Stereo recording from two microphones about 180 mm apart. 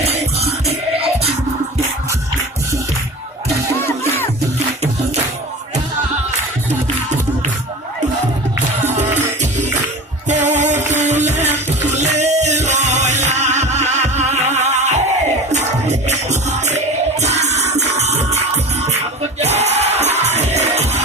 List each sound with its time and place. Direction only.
0.0 s music: 35° right (ahead or behind)
3.8 s music: 10° left (ahead or behind)
8.8 s music: 40° right (ahead or behind)
10.2 s music: 40° right (ahead or behind)
16.0 s music: 40° right (ahead or behind)